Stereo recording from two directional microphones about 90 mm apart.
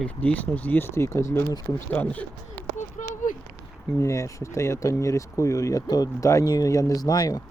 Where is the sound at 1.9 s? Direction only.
20° left (ahead or behind).